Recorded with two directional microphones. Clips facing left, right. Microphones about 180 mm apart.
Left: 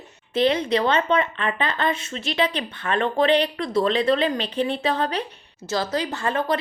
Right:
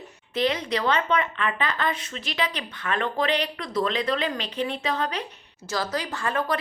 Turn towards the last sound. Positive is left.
turn(degrees=25)  # may be behind; listen again after turning